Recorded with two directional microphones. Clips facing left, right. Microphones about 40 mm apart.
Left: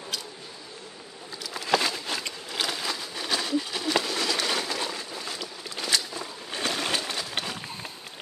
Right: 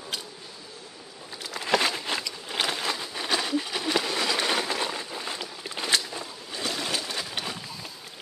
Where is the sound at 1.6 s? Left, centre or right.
Right.